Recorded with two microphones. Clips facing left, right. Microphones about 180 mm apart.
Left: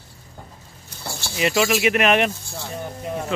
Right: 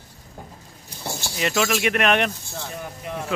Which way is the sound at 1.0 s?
15° right (ahead or behind).